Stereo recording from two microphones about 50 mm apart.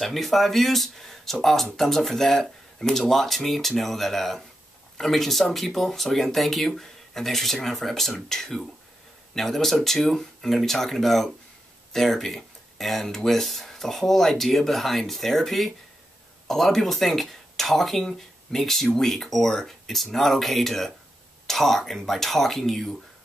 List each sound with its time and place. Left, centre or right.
0.0 s speech: centre